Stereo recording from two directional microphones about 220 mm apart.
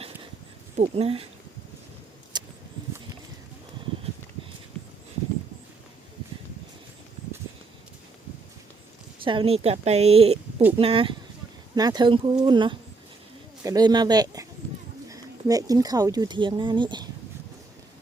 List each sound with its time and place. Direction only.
0.8 s speech: 25° right (ahead or behind)
2.3 s a sound: 20° right (ahead or behind)
9.2 s a man's voice: 25° right (ahead or behind)